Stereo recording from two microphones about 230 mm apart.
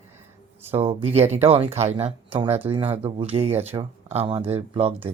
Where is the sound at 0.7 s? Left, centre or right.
Right.